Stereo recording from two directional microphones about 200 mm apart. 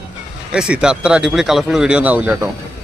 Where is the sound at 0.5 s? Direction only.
5° right (ahead or behind).